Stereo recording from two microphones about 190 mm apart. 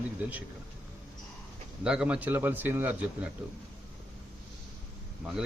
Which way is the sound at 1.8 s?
5° right (ahead or behind).